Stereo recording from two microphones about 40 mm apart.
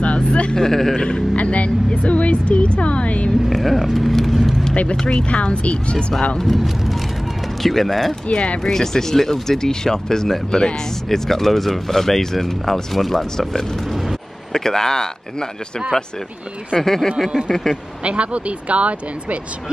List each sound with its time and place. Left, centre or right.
0.0 s vehicle: left
0.6 s speech: centre
0.9 s speech: left
1.3 s speech: left
3.4 s vehicle: centre
5.0 s speech: left
6.4 s speech: centre
8.1 s speech: left
8.6 s speech: centre
16.7 s speech: centre
18.0 s speech: right